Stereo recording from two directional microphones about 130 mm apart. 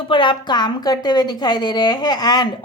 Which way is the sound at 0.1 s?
40° left (ahead or behind).